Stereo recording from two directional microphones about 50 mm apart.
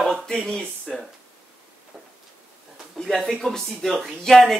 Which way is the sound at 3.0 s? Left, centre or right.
Centre.